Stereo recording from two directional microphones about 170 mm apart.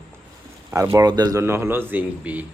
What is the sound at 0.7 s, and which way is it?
Speech, 20° right (ahead or behind).